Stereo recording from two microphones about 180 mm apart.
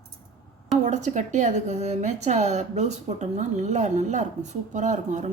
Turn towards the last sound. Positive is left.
turn(degrees=-40)  # may be behind; listen again after turning